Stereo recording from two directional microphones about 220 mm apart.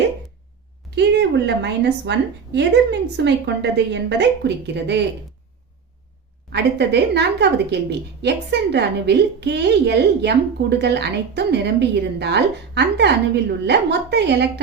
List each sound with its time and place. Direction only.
0.9 s a woman's voice: 50° right (ahead or behind)
6.5 s a woman's voice: 50° right (ahead or behind)